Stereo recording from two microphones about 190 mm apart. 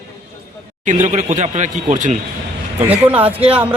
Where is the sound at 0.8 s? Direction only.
40° right (ahead or behind).